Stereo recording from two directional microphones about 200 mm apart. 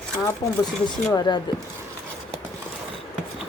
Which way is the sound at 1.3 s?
20° left (ahead or behind).